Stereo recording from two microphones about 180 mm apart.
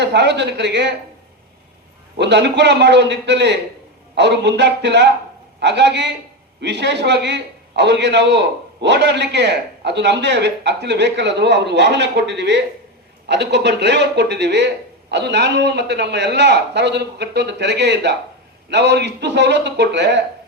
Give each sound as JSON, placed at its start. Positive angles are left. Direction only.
{"t": 0.0, "sound": "a man's voice", "side_deg": -70}
{"t": 2.1, "sound": "a man's voice", "side_deg": -70}